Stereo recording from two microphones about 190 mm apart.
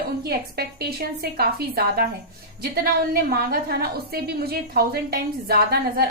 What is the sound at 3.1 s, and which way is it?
A woman's voice, 50° right (ahead or behind).